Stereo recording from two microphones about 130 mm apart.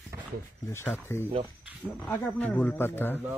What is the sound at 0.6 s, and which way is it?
Speech, 20° left (ahead or behind).